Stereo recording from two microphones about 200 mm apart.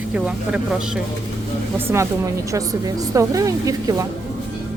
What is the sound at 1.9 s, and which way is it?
Speech, 15° right (ahead or behind).